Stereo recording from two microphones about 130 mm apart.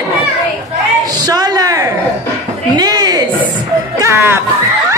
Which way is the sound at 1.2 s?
30° right (ahead or behind).